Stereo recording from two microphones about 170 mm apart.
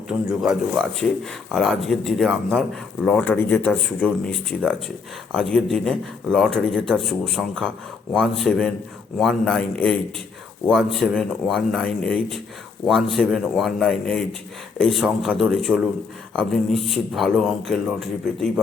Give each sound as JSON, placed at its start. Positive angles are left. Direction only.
{"t": 0.1, "sound": "speech", "side_deg": -5}